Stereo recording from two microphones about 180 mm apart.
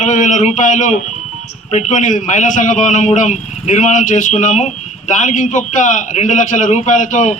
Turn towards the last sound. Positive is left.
turn(degrees=45)  # may be behind; listen again after turning